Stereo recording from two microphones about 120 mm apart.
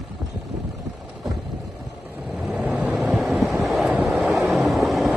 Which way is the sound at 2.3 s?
10° right (ahead or behind).